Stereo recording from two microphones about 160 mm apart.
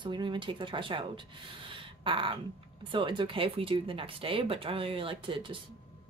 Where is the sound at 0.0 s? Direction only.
30° right (ahead or behind).